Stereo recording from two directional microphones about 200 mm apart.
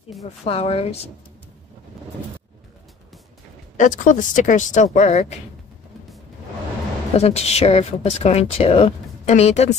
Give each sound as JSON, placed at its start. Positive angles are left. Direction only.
{"t": 0.5, "sound": "a woman's voice", "side_deg": 30}
{"t": 3.7, "sound": "a woman's voice", "side_deg": 40}
{"t": 7.2, "sound": "a woman's voice", "side_deg": 30}